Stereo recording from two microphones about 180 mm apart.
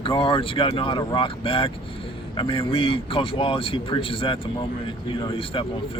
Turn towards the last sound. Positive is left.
turn(degrees=30)  # may be behind; listen again after turning